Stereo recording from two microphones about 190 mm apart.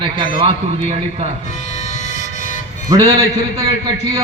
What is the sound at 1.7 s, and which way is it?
Vehicle, 35° left (ahead or behind).